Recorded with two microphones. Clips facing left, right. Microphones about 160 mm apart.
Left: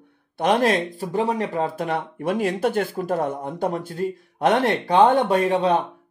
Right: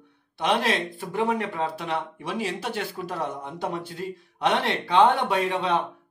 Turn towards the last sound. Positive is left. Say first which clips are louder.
# left 5 dB
turn(degrees=40)  # may be behind; listen again after turning